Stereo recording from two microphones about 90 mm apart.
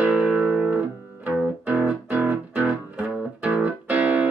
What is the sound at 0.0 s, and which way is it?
Music, 10° right (ahead or behind).